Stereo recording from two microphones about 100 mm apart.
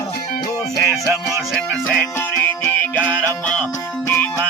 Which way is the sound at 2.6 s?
20° left (ahead or behind).